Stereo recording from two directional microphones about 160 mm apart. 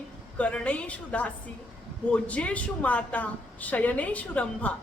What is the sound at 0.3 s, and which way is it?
A woman's voice, 10° left (ahead or behind).